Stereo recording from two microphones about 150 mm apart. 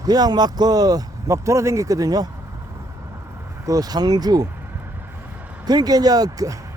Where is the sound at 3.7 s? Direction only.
25° right (ahead or behind).